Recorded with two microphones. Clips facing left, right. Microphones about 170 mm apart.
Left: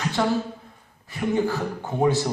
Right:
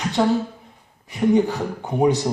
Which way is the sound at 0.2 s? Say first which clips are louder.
Right 5 dB; 15° right (ahead or behind).